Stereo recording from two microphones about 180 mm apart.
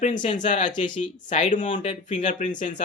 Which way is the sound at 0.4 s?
45° left (ahead or behind).